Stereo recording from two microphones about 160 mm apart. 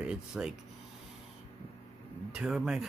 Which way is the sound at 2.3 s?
5° right (ahead or behind).